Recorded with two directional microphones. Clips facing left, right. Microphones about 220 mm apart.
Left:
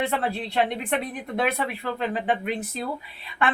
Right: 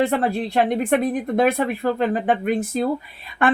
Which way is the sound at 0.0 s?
45° right (ahead or behind).